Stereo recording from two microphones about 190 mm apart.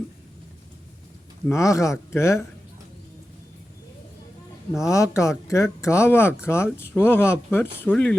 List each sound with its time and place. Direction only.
1.5 s speech: 15° left (ahead or behind)
4.8 s speech: 15° left (ahead or behind)